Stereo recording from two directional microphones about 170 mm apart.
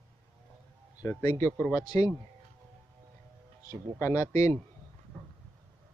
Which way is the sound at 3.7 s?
20° left (ahead or behind).